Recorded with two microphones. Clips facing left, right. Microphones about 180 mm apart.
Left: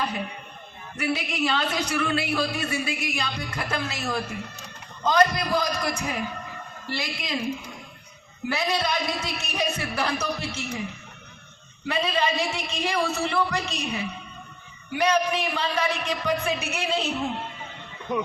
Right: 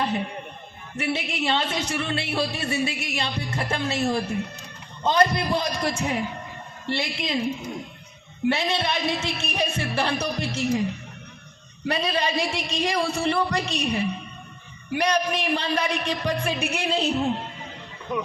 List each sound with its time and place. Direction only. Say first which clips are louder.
1.0 s speech: even; 25° right (ahead or behind)
8.5 s music: even; 25° right (ahead or behind)